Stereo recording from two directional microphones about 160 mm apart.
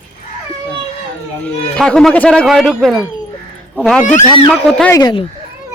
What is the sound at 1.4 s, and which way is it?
Speech, 5° left (ahead or behind).